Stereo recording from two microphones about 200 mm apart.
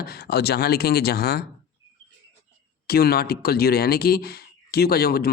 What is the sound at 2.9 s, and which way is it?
Speech, 50° left (ahead or behind).